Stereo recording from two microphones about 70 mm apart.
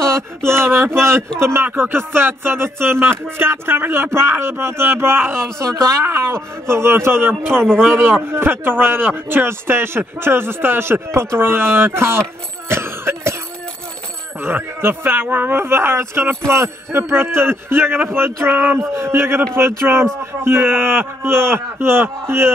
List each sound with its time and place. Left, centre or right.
0.5 s speech: right
12.6 s cough: right
14.4 s speech: right
18.8 s speech: right